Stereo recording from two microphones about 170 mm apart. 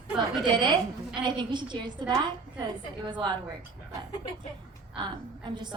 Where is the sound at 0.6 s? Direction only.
25° right (ahead or behind).